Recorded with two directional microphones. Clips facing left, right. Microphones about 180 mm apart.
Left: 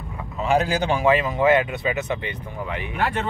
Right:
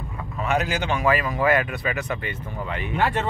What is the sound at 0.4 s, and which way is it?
Speech, 30° left (ahead or behind).